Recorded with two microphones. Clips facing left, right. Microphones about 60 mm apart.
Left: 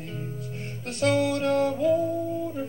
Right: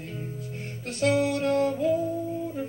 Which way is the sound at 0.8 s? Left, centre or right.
Left.